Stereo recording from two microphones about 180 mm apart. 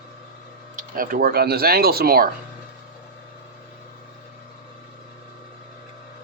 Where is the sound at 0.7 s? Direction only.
50° right (ahead or behind).